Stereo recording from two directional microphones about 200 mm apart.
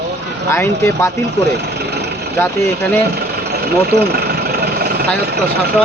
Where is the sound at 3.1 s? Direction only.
50° right (ahead or behind).